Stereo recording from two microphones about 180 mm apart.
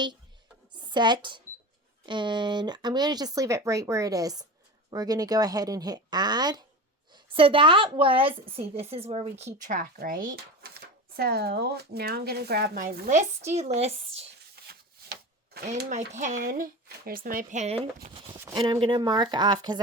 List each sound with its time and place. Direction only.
0.7 s a sound: 25° right (ahead or behind)
2.0 s speech: 25° right (ahead or behind)
9.6 s speech: 45° right (ahead or behind)
13.7 s speech: 35° right (ahead or behind)
14.7 s a sound: 65° right (ahead or behind)
15.9 s speech: 40° right (ahead or behind); by 19.8 s 25° right (ahead or behind)